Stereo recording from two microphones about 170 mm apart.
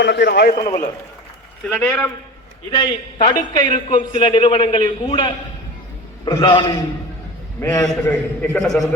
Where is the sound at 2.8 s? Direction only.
30° left (ahead or behind).